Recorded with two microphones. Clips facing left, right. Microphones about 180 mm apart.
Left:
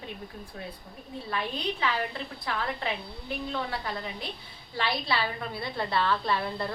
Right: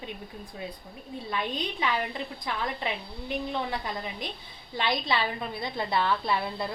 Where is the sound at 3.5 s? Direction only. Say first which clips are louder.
Right 1 dB; 15° right (ahead or behind).